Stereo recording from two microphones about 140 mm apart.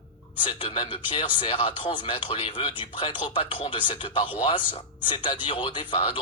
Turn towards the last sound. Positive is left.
turn(degrees=35)  # may be behind; listen again after turning